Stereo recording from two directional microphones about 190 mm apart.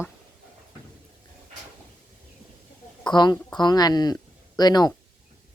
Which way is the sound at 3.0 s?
25° left (ahead or behind).